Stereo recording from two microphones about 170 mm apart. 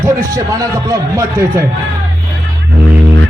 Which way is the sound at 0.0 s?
20° right (ahead or behind).